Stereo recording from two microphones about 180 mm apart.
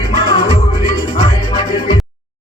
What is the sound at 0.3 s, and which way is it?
Music, 25° left (ahead or behind).